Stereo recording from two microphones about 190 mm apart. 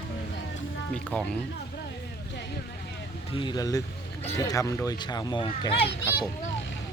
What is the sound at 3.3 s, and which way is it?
Speech, 25° left (ahead or behind).